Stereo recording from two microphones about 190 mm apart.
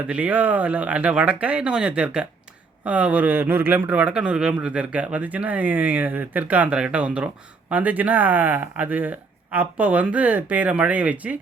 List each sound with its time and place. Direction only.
0.1 s speech: 10° right (ahead or behind)